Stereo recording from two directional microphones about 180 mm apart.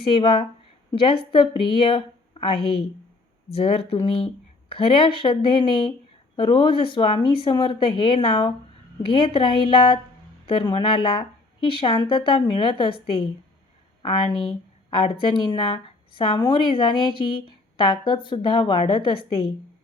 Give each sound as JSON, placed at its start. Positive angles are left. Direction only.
{"t": 0.1, "sound": "speech", "side_deg": 25}